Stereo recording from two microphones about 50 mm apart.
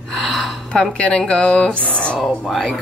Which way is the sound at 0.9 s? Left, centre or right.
Left.